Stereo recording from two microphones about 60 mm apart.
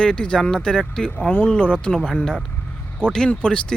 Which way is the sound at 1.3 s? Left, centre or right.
Left.